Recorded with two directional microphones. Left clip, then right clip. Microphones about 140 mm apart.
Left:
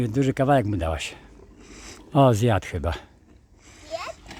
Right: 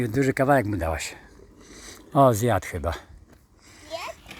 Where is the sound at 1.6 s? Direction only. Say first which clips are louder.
Left 1 dB; 45° left (ahead or behind).